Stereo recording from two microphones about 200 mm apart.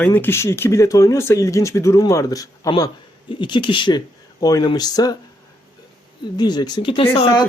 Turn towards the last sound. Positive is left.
turn(degrees=25)  # may be behind; listen again after turning